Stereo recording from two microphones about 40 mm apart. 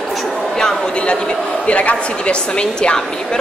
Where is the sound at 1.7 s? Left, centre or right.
Left.